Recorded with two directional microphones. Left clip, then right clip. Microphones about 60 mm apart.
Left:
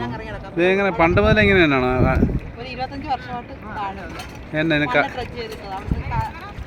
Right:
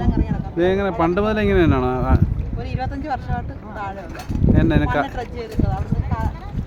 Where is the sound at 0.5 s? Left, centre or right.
Right.